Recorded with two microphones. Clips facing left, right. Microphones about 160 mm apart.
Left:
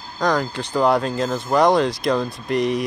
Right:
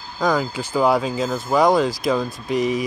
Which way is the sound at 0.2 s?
5° right (ahead or behind).